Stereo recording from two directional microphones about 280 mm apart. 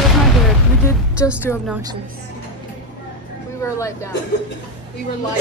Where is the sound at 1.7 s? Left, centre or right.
Centre.